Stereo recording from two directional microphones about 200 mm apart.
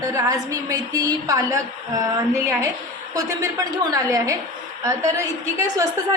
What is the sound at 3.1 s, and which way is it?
A woman's voice, 15° right (ahead or behind).